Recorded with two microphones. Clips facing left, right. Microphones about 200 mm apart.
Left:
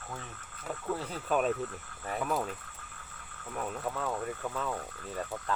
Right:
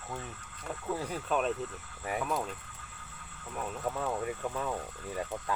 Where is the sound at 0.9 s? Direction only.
10° right (ahead or behind).